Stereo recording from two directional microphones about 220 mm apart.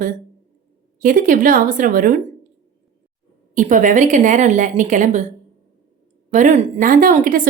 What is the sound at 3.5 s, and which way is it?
A woman's voice, 35° right (ahead or behind).